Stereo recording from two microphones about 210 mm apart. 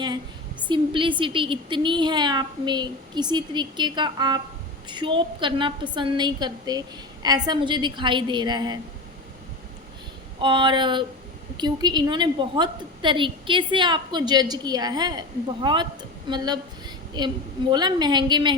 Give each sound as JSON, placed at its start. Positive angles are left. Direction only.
{"t": 0.7, "sound": "a woman's voice", "side_deg": -25}
{"t": 10.4, "sound": "a woman's voice", "side_deg": -20}